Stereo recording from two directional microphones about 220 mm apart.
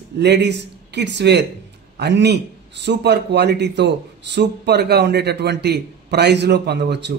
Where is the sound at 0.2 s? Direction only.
50° right (ahead or behind).